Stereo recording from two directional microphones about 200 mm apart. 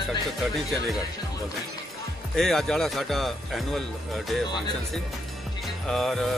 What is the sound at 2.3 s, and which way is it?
Speech, centre (ahead or behind).